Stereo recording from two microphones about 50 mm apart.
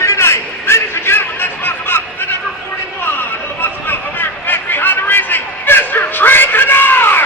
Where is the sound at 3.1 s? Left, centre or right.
Left.